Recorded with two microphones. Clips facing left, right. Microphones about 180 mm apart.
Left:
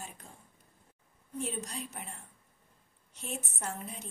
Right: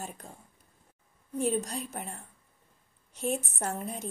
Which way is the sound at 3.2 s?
45° right (ahead or behind).